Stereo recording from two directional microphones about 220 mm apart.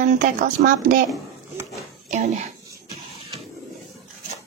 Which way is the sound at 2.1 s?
35° right (ahead or behind).